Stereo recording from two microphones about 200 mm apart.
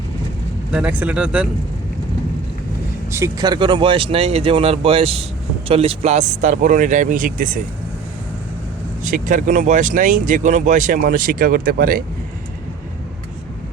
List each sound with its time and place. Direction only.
0.7 s speech: 5° right (ahead or behind)
3.1 s speech: 15° right (ahead or behind); by 7.6 s 45° right (ahead or behind)
9.0 s speech: 40° right (ahead or behind)